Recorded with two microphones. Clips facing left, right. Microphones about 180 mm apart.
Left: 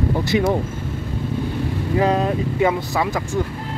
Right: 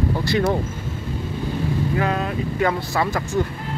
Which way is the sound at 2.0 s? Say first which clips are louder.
Left 8 dB; 30° left (ahead or behind).